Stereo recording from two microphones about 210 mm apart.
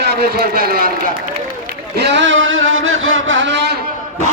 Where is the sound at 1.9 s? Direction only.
55° right (ahead or behind).